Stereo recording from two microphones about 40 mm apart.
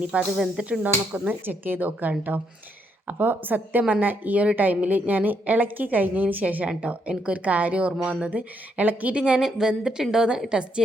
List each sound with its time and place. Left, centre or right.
0.1 s a woman's voice: right
1.3 s a woman's voice: right
6.7 s a woman's voice: right
8.9 s a woman's voice: right
9.1 s a woman's voice: right